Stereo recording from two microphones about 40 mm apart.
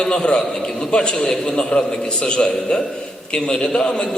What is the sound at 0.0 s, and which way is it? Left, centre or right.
A man's voice, left.